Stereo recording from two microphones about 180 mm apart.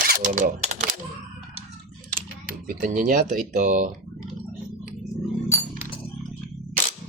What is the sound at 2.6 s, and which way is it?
Speech, 45° right (ahead or behind).